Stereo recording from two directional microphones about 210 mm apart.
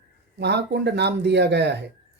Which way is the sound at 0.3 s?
55° right (ahead or behind).